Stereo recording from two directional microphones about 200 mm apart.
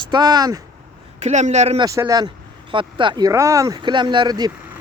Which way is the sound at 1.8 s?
15° right (ahead or behind).